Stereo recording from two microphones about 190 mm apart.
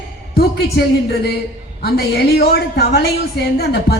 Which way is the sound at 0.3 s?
55° left (ahead or behind).